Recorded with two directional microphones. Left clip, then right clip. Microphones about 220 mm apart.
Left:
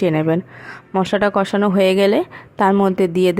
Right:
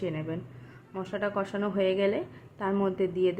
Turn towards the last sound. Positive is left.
turn(degrees=50)  # may be behind; listen again after turning